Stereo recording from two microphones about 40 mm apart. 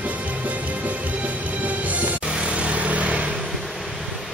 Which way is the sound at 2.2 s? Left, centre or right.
Right.